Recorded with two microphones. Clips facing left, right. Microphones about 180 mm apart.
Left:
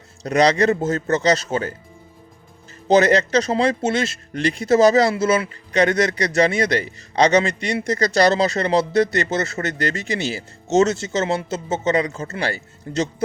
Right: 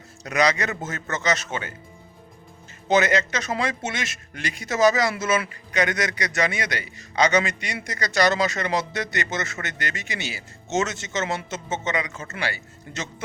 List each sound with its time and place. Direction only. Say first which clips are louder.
0.2 s speech: left 6 dB; 35° left (ahead or behind)
2.9 s speech: left 6 dB; 35° left (ahead or behind)